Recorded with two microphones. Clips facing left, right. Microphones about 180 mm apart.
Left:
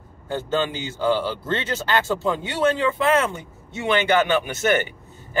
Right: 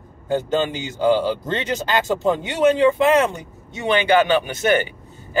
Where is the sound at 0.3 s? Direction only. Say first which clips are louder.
Right 3 dB; 15° right (ahead or behind).